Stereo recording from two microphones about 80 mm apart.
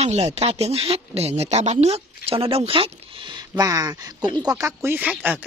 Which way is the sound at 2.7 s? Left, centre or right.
Right.